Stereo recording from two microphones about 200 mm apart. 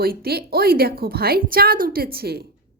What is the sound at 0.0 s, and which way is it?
Speech, 50° right (ahead or behind).